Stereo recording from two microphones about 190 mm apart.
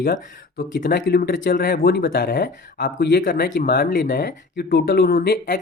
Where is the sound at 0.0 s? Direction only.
50° left (ahead or behind).